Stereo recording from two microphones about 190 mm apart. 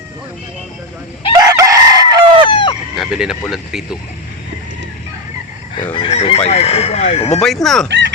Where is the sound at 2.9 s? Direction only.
Centre (ahead or behind).